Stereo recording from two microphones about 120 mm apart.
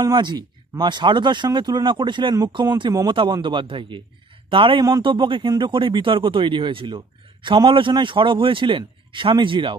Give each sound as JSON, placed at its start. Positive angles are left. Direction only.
{"t": 0.0, "sound": "speech", "side_deg": -40}
{"t": 3.1, "sound": "a man's voice", "side_deg": -45}